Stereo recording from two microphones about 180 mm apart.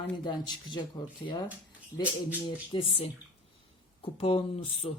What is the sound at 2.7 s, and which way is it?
Speech, 30° left (ahead or behind).